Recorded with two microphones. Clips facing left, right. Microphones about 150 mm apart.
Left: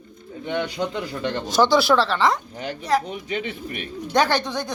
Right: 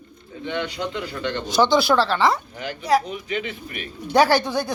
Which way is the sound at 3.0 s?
30° left (ahead or behind).